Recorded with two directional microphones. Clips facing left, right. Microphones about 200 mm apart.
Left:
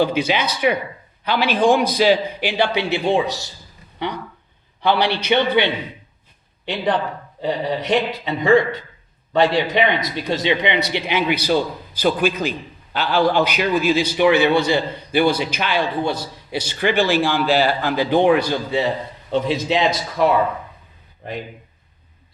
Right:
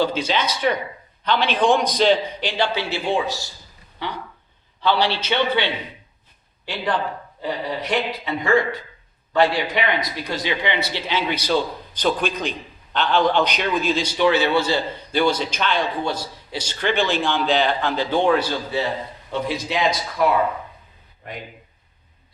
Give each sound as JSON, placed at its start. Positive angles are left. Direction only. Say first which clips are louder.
{"t": 0.0, "sound": "a man's voice", "louder": "left 3 dB", "side_deg": 10}
{"t": 4.8, "sound": "a man's voice", "louder": "left 2 dB", "side_deg": 15}
{"t": 7.4, "sound": "a man's voice", "louder": "left 4 dB", "side_deg": 25}